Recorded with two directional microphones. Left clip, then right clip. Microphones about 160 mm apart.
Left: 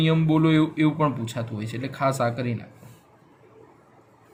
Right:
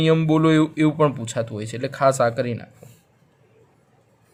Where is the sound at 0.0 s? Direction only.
55° right (ahead or behind).